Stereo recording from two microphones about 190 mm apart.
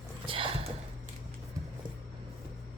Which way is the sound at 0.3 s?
25° right (ahead or behind).